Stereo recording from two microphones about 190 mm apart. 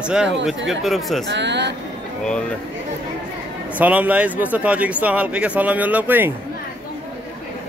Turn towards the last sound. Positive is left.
turn(degrees=-10)  # may be behind; listen again after turning